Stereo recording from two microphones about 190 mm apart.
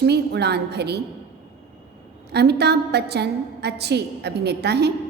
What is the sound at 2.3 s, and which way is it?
A woman's voice, 60° right (ahead or behind).